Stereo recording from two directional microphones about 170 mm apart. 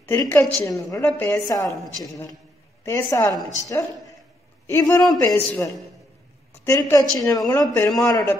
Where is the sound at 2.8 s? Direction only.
20° left (ahead or behind).